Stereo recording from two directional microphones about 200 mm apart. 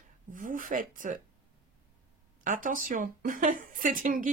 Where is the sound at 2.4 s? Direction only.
40° right (ahead or behind).